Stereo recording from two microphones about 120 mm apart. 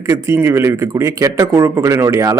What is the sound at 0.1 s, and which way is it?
A man's voice, 25° right (ahead or behind).